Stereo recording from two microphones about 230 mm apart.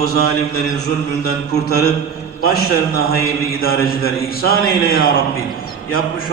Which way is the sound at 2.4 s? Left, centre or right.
Left.